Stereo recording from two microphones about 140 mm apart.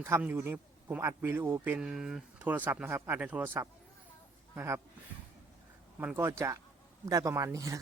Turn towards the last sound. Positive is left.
turn(degrees=-25)  # may be behind; listen again after turning